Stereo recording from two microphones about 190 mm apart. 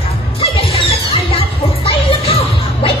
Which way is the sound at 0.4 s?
30° left (ahead or behind).